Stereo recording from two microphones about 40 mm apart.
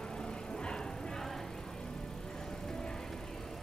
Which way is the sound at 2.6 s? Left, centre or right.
Centre.